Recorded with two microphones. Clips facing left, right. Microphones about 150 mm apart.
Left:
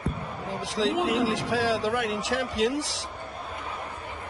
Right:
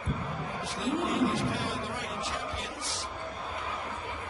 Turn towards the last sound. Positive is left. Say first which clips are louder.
# left 12 dB
turn(degrees=90)